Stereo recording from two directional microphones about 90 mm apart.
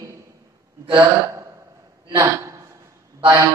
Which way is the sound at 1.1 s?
35° right (ahead or behind).